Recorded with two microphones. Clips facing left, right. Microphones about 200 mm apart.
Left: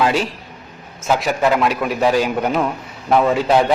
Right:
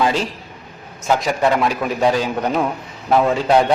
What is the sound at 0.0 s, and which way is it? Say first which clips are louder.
A man's voice: left 1 dB; 5° left (ahead or behind).